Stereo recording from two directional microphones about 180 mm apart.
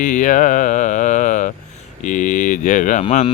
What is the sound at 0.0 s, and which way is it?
Speech, 45° left (ahead or behind).